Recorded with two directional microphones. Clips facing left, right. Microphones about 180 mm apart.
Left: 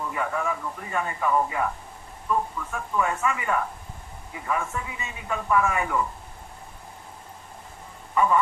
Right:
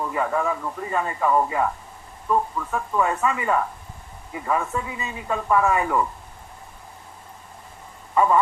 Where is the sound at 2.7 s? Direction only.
35° right (ahead or behind).